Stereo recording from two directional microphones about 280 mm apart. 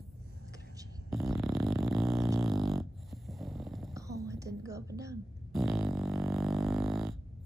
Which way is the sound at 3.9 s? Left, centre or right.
Centre.